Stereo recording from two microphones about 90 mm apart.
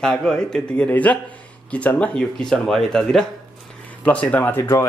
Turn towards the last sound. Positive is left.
turn(degrees=25)  # may be behind; listen again after turning